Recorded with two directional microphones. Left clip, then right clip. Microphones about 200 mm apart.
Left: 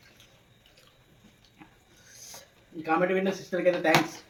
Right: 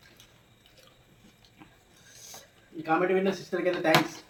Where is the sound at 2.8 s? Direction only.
15° left (ahead or behind).